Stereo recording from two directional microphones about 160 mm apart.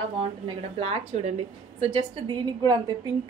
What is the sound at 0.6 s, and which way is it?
Speech, 40° right (ahead or behind).